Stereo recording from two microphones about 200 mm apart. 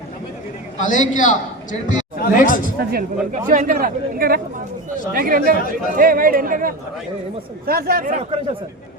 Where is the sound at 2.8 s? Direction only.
50° right (ahead or behind).